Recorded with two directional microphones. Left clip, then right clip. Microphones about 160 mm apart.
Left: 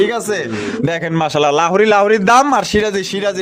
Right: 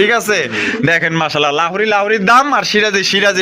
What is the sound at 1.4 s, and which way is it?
Speech, 35° left (ahead or behind).